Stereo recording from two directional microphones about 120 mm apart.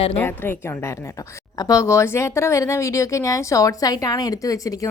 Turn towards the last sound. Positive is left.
turn(degrees=30)  # may be behind; listen again after turning